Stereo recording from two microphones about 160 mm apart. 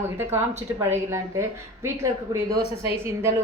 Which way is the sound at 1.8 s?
20° right (ahead or behind).